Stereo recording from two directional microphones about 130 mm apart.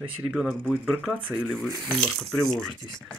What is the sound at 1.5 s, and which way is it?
Speech, 5° left (ahead or behind).